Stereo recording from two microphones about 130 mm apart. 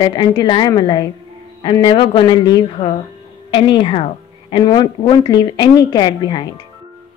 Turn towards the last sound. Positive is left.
turn(degrees=35)  # may be behind; listen again after turning